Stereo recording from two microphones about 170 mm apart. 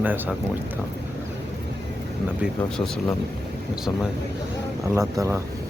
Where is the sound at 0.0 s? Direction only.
10° right (ahead or behind).